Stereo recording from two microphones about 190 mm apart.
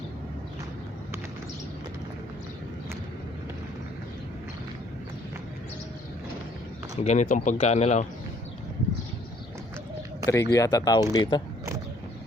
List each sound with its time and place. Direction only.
6.9 s speech: 35° left (ahead or behind)
10.2 s speech: 15° left (ahead or behind)